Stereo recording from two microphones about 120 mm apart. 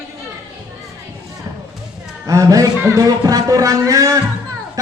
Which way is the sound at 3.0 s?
30° right (ahead or behind).